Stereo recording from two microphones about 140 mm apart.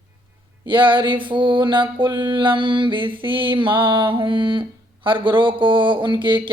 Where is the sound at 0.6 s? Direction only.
35° right (ahead or behind).